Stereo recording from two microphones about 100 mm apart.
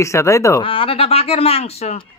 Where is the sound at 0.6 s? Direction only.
65° left (ahead or behind); by 2.0 s 90° left.